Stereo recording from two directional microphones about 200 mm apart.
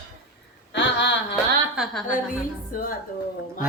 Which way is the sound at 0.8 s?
60° left (ahead or behind).